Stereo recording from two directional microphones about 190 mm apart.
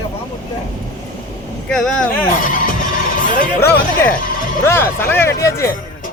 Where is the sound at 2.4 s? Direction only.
45° left (ahead or behind).